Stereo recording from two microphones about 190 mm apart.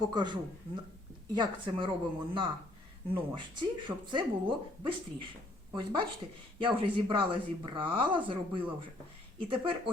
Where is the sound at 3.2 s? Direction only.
25° right (ahead or behind).